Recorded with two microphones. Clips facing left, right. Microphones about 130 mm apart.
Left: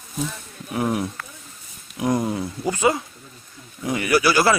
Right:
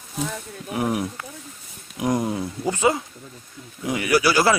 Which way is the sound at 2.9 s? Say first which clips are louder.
Left 1 dB; 20° right (ahead or behind).